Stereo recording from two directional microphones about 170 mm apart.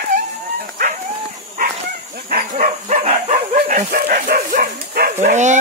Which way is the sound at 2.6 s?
35° right (ahead or behind).